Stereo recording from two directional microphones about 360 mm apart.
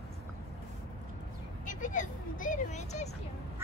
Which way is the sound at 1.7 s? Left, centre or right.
Left.